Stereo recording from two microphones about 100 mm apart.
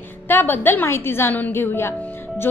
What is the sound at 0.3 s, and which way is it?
A woman's voice, 20° left (ahead or behind).